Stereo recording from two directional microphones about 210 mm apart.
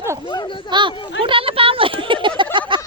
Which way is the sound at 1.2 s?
25° right (ahead or behind).